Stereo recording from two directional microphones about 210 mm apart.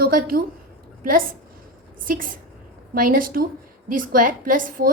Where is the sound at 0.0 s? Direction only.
45° right (ahead or behind).